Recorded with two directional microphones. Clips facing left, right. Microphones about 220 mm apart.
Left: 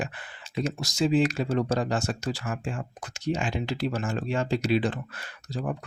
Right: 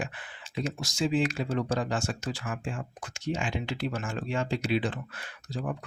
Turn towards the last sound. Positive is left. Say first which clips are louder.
# left 2 dB
turn(degrees=40)  # may be behind; listen again after turning